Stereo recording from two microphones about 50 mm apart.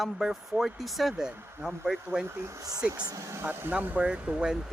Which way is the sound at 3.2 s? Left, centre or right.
Right.